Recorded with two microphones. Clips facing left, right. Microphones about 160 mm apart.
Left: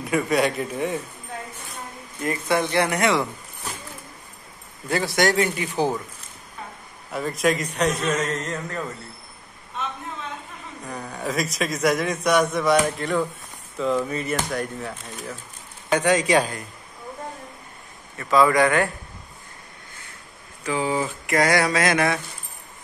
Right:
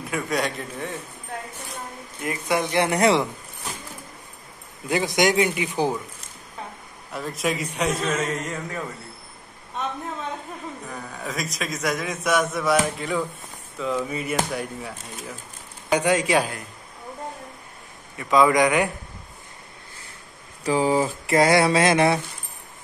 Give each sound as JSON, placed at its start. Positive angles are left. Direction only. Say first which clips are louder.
{"t": 0.0, "sound": "a man's voice", "louder": "left 5 dB", "side_deg": 0}
{"t": 2.2, "sound": "a man's voice", "louder": "left 2 dB", "side_deg": -15}
{"t": 2.9, "sound": "a sound", "louder": "right 2 dB", "side_deg": -30}
{"t": 4.8, "sound": "a man's voice", "louder": "even", "side_deg": -15}
{"t": 7.1, "sound": "a man's voice", "louder": "left 4 dB", "side_deg": 0}
{"t": 10.9, "sound": "a man's voice", "louder": "left 8 dB", "side_deg": 0}
{"t": 15.9, "sound": "a man's voice", "louder": "left 1 dB", "side_deg": -10}
{"t": 18.1, "sound": "a man's voice", "louder": "even", "side_deg": -15}
{"t": 20.6, "sound": "a sound", "louder": "right 4 dB", "side_deg": -35}